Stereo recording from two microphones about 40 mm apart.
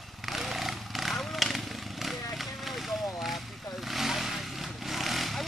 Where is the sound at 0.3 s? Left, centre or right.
Centre.